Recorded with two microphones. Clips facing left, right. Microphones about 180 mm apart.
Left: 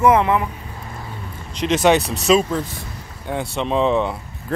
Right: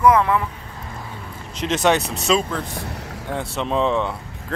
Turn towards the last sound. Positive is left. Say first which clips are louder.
# left 2 dB
turn(degrees=5)  # may be behind; listen again after turning